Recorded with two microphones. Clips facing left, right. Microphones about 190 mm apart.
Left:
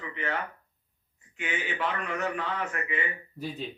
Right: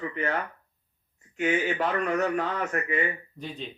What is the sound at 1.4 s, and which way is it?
A man's voice, 45° right (ahead or behind).